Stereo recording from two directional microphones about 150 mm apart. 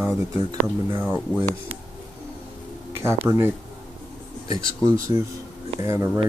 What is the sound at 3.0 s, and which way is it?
Speech, 15° right (ahead or behind).